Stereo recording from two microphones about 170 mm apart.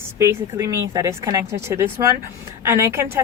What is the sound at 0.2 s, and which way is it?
A woman's voice, 15° right (ahead or behind).